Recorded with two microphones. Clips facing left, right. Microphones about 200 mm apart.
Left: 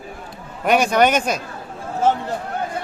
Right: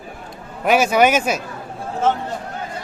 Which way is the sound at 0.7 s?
5° right (ahead or behind).